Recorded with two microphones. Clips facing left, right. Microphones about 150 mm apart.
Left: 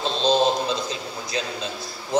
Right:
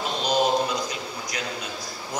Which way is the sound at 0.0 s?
25° left (ahead or behind).